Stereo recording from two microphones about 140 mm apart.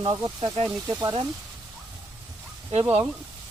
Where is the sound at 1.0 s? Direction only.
35° right (ahead or behind).